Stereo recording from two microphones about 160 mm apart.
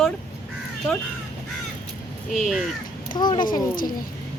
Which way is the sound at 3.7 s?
60° left (ahead or behind).